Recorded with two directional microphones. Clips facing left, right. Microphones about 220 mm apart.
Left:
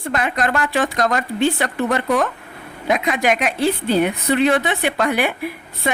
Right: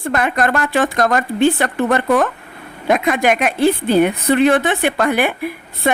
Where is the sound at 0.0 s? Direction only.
55° right (ahead or behind).